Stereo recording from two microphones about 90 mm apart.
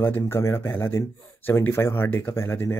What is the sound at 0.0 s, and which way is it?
Speech, 25° left (ahead or behind).